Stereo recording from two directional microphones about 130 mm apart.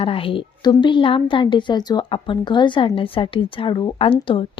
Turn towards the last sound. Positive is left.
turn(degrees=40)  # may be behind; listen again after turning